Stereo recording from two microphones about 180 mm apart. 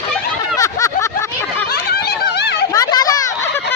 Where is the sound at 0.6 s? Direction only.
20° left (ahead or behind).